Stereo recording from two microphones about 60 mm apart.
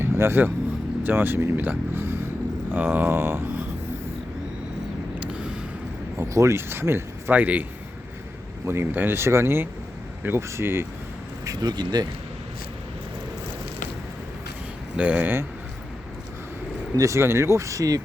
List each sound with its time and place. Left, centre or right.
0.0 s speech: right
5.2 s vehicle: centre
6.1 s speech: right
6.7 s speech: right
7.3 s a man's voice: right
8.6 s speech: right
11.4 s speech: right
14.9 s speech: right
17.2 s speech: right